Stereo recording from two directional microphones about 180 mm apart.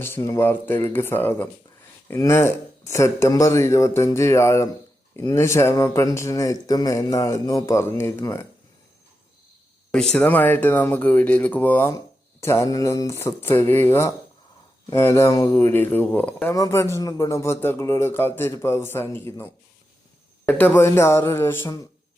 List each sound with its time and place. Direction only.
0.0 s speech: 15° left (ahead or behind)
9.9 s speech: 5° left (ahead or behind)